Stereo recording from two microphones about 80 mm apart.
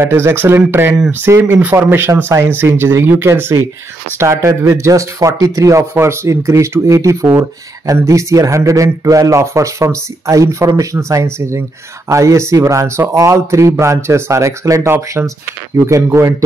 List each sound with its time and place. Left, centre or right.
0.0 s speech: right